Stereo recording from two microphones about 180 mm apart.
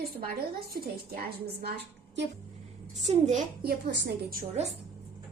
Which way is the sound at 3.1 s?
40° right (ahead or behind).